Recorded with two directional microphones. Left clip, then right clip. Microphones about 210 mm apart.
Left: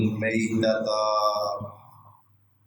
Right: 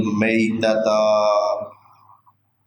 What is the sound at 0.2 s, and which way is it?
Mantra, 35° right (ahead or behind).